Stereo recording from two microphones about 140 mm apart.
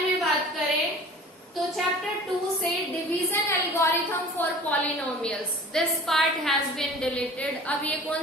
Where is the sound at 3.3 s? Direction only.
20° left (ahead or behind).